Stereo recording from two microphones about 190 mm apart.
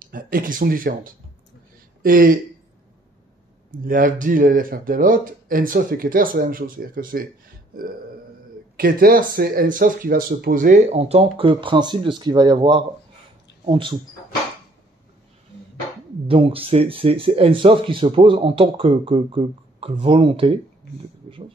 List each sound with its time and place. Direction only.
0.1 s speech: 45° right (ahead or behind)
3.8 s speech: 50° right (ahead or behind)
8.7 s speech: 50° right (ahead or behind); by 13.9 s 25° right (ahead or behind)
16.3 s speech: 30° right (ahead or behind)